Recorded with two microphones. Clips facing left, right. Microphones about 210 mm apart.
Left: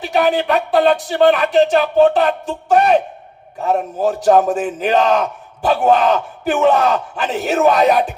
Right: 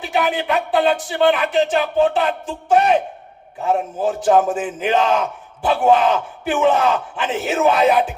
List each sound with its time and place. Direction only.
0.0 s speech: 40° left (ahead or behind)
4.0 s speech: 40° left (ahead or behind)